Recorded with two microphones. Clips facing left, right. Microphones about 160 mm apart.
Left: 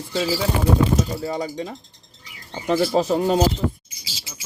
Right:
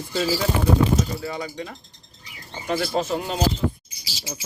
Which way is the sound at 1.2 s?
35° left (ahead or behind).